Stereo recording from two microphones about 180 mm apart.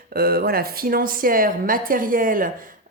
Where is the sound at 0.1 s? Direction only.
60° right (ahead or behind).